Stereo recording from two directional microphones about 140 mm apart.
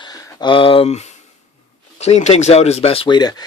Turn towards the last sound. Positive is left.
turn(degrees=30)  # may be behind; listen again after turning